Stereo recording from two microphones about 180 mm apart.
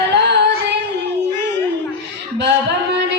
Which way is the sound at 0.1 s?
70° right (ahead or behind).